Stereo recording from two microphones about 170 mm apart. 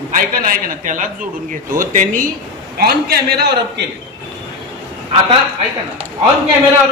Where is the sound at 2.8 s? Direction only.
70° right (ahead or behind).